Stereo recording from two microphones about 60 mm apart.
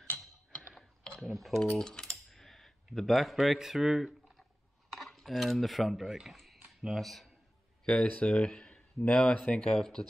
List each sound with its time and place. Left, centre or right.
0.7 s mechanisms: centre
1.2 s speech: centre
1.8 s typing: centre
4.9 s cutlery: centre
6.3 s a sound: centre
6.6 s a sound: centre
7.0 s speech: centre
7.8 s speech: centre